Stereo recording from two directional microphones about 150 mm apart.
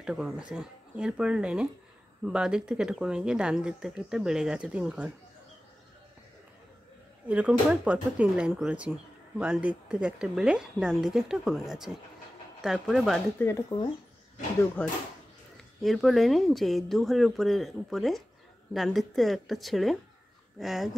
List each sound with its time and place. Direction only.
0.0 s speech: 5° right (ahead or behind)
7.2 s speech: 10° right (ahead or behind)
13.4 s speech: 15° left (ahead or behind)
14.8 s speech: 10° left (ahead or behind)